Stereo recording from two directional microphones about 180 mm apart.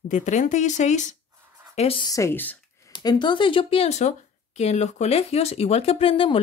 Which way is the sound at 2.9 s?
25° left (ahead or behind).